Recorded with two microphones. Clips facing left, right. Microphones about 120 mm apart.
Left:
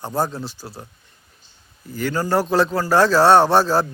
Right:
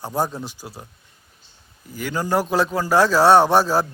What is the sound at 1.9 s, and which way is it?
A man's voice, 10° right (ahead or behind).